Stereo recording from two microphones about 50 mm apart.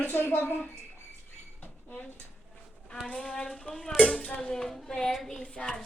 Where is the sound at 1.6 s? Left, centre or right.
Left.